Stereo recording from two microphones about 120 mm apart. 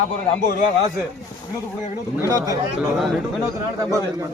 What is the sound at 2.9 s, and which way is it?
Speech, centre (ahead or behind).